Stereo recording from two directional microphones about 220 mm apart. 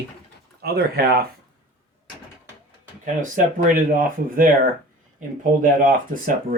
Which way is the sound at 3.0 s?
35° right (ahead or behind).